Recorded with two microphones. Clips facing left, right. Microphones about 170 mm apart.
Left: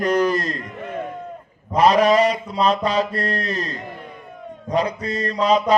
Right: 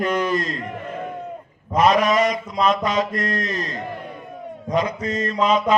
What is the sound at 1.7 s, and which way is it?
A man's voice, 35° left (ahead or behind).